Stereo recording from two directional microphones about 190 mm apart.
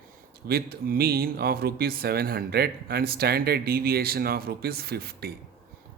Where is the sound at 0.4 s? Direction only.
55° right (ahead or behind).